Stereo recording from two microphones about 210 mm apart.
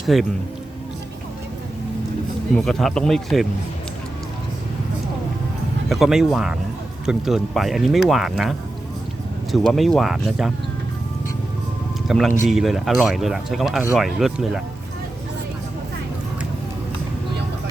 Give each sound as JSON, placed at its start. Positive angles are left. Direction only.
{"t": 0.0, "sound": "speech", "side_deg": 0}
{"t": 2.6, "sound": "speech", "side_deg": 0}
{"t": 5.9, "sound": "speech", "side_deg": 0}
{"t": 12.0, "sound": "speech", "side_deg": 0}